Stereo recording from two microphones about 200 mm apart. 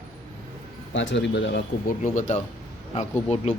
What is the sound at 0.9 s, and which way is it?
Speech, 65° left (ahead or behind).